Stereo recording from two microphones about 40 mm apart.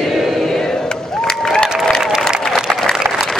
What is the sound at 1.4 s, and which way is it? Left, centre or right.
Applause, centre.